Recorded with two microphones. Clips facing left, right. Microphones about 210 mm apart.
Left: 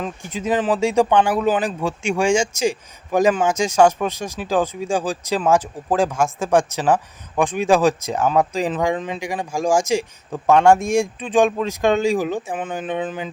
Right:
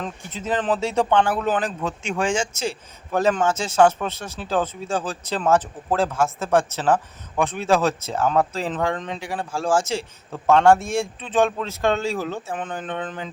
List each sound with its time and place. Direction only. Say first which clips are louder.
0.0 s speech: left 5 dB; 10° left (ahead or behind)